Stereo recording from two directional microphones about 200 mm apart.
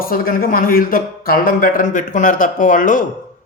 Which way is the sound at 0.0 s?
45° left (ahead or behind).